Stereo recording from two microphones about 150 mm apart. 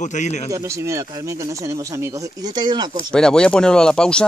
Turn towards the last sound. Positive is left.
turn(degrees=5)  # may be behind; listen again after turning